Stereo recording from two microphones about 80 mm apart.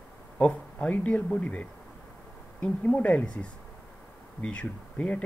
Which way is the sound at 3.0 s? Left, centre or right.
Centre.